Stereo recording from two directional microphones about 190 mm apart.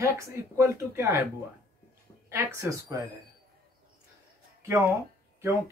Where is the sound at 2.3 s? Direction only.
15° right (ahead or behind).